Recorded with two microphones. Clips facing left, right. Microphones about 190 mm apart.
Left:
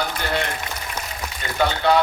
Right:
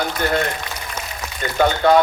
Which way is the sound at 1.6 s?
45° right (ahead or behind).